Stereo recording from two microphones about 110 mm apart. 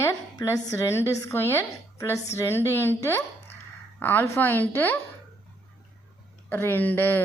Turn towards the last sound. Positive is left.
turn(degrees=15)  # may be behind; listen again after turning